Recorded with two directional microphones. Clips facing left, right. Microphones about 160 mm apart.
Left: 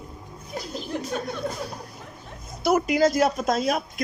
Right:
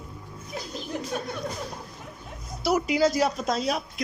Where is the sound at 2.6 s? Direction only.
50° left (ahead or behind).